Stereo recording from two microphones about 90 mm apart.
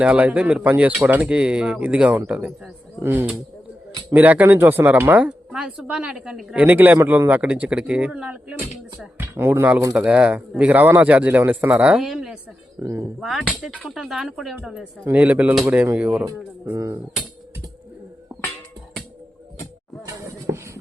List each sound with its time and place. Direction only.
0.0 s speech: 15° right (ahead or behind)
6.7 s speech: 20° right (ahead or behind)
9.1 s speech: 25° right (ahead or behind)
12.0 s speech: 5° right (ahead or behind)
12.8 s speech: 35° right (ahead or behind)
13.1 s speech: 5° right (ahead or behind)
15.1 s speech: 15° right (ahead or behind)
16.7 s speech: 35° right (ahead or behind)
20.0 s a sound: 35° right (ahead or behind)